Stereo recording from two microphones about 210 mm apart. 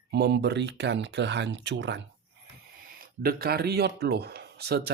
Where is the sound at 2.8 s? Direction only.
45° right (ahead or behind).